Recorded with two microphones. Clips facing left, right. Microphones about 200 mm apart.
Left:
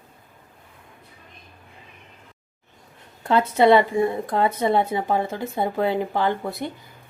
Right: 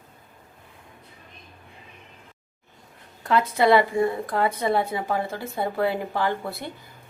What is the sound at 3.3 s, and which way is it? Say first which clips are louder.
Speech: left 3 dB; 25° left (ahead or behind).